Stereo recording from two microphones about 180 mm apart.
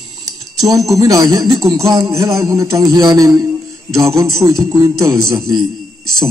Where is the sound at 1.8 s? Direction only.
20° right (ahead or behind).